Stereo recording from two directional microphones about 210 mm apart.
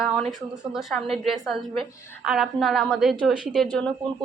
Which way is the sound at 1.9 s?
10° left (ahead or behind).